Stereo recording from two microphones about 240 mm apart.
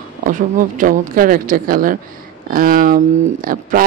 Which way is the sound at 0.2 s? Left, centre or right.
Right.